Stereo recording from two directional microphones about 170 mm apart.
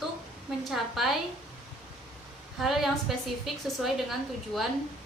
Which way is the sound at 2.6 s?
Centre (ahead or behind).